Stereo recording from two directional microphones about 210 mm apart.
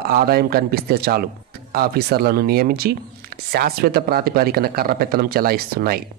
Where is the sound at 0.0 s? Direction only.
45° right (ahead or behind).